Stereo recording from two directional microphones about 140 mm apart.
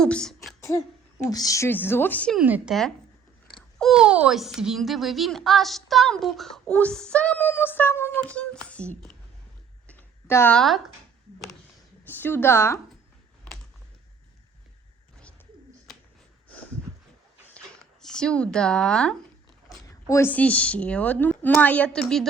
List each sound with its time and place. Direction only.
0.0 s speech: 5° left (ahead or behind)
0.6 s a sound: 20° left (ahead or behind)
1.3 s speech: 25° left (ahead or behind)
2.4 s speech: 10° right (ahead or behind)
3.5 s speech: centre (ahead or behind)
9.8 s a sound: 15° left (ahead or behind)
10.5 s speech: centre (ahead or behind)
12.0 s speech: 15° left (ahead or behind)
15.9 s a sound: centre (ahead or behind)
18.0 s speech: 5° left (ahead or behind)
20.1 s speech: 15° left (ahead or behind)